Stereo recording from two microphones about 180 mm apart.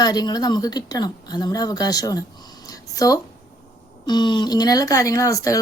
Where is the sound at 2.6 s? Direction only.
20° left (ahead or behind).